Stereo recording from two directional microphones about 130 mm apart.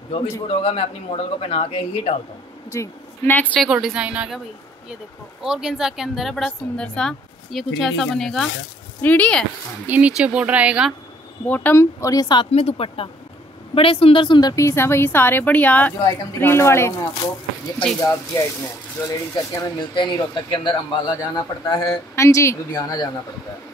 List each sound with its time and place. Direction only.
0.5 s speech: 50° left (ahead or behind)
2.7 s a woman's voice: 20° left (ahead or behind)
3.6 s speech: centre (ahead or behind)
5.4 s a woman's voice: 5° right (ahead or behind)
9.8 s speech: 10° right (ahead or behind)
11.4 s a man's voice: 15° left (ahead or behind); by 12.4 s 30° left (ahead or behind)
12.5 s a woman's voice: 50° left (ahead or behind)
14.5 s a woman's voice: 20° left (ahead or behind)
19.0 s a man's voice: 25° left (ahead or behind)
19.9 s a man's voice: 40° left (ahead or behind)